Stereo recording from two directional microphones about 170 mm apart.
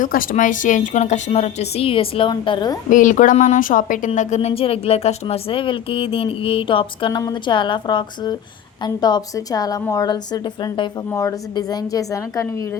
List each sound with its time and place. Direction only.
0.0 s a woman's voice: 55° left (ahead or behind); by 2.7 s 30° left (ahead or behind)
2.9 s a woman's voice: 50° left (ahead or behind); by 12.8 s 20° left (ahead or behind)